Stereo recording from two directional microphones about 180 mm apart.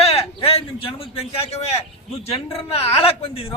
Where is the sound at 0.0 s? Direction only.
35° left (ahead or behind).